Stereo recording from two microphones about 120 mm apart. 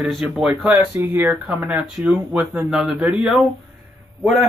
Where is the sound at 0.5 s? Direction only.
10° right (ahead or behind).